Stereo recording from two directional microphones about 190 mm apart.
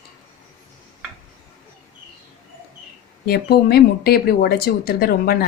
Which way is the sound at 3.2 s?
55° left (ahead or behind).